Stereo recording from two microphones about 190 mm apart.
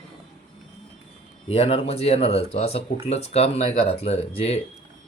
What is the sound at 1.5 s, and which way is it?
Speech, 30° left (ahead or behind).